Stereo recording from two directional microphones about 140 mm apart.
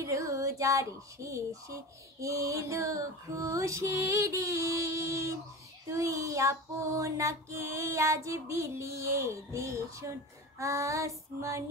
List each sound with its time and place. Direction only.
0.0 s child singing: 25° right (ahead or behind)